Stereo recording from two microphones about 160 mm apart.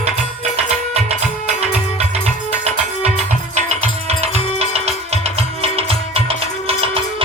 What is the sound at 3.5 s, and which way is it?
Music, 45° right (ahead or behind).